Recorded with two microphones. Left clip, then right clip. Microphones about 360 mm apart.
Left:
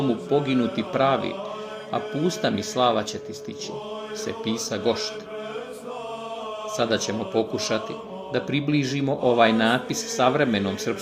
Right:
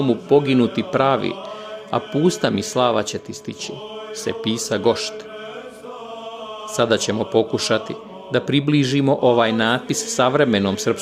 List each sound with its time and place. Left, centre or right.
0.1 s speech: right
4.2 s speech: right
6.7 s speech: right